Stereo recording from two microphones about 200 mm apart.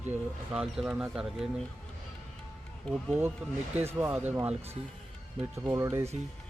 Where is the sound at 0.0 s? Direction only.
5° right (ahead or behind).